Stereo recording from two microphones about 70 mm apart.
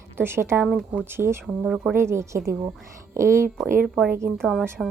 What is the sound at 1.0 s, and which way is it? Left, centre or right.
Speech, right.